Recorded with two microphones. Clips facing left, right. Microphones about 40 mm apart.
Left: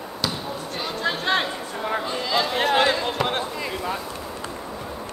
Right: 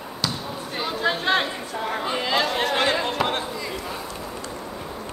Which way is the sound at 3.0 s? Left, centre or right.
Centre.